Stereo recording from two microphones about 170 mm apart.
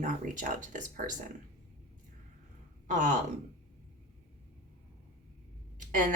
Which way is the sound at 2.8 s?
50° right (ahead or behind).